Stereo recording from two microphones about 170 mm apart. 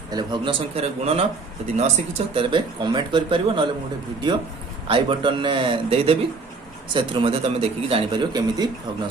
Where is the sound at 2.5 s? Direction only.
30° right (ahead or behind).